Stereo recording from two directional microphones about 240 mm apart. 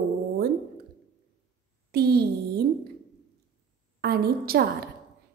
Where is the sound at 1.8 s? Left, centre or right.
Right.